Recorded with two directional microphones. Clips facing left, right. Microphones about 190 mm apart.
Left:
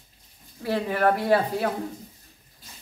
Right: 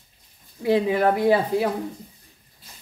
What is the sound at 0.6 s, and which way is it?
Speech, 15° right (ahead or behind).